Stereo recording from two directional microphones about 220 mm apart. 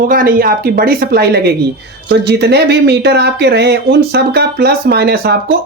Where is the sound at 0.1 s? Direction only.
40° right (ahead or behind).